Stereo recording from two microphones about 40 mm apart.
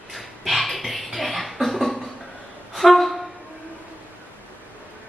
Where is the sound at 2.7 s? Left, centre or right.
Centre.